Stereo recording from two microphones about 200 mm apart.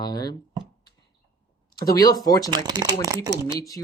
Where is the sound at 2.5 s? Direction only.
20° right (ahead or behind).